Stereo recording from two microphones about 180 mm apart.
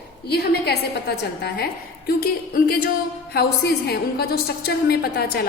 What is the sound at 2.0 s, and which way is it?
A woman's voice, 55° left (ahead or behind).